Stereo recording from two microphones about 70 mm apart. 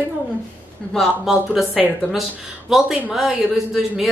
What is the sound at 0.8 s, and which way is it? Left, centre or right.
Speech, centre.